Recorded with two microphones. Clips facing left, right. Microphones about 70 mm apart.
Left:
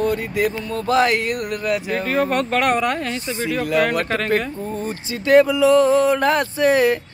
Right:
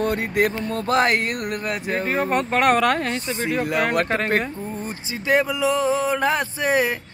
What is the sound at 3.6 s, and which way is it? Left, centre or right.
Speech, right.